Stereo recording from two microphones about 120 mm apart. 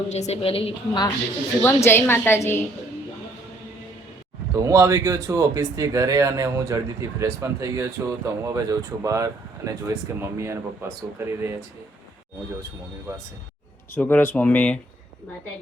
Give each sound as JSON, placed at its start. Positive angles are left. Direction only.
{"t": 0.1, "sound": "a woman's voice", "side_deg": 65}
{"t": 1.6, "sound": "a woman's voice", "side_deg": 20}
{"t": 4.5, "sound": "speech", "side_deg": -25}
{"t": 13.1, "sound": "speech", "side_deg": -30}
{"t": 13.9, "sound": "speech", "side_deg": 15}